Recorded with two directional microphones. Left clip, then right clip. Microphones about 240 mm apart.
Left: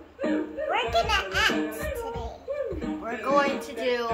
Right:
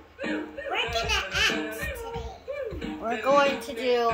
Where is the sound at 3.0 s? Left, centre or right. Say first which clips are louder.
Right 2 dB; right.